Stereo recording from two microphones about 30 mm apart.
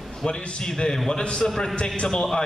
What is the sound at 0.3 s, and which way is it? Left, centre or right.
A man's voice, left.